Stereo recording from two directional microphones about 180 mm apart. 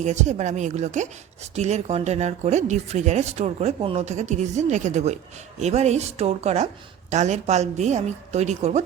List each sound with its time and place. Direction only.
0.0 s speech: 40° right (ahead or behind)